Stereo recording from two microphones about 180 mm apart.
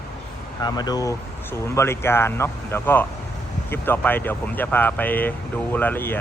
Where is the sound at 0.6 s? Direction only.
20° left (ahead or behind).